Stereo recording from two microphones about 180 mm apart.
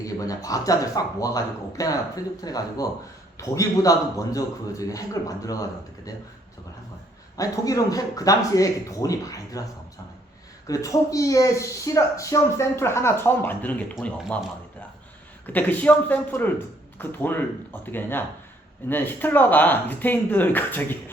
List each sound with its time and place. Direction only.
0.0 s speech: 20° left (ahead or behind)
7.3 s speech: 20° left (ahead or behind)
10.7 s speech: 20° left (ahead or behind)